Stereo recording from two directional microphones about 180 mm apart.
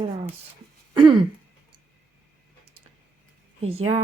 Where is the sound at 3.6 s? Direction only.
35° right (ahead or behind).